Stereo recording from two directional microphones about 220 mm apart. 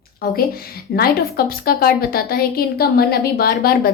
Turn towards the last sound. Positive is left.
turn(degrees=45)  # may be behind; listen again after turning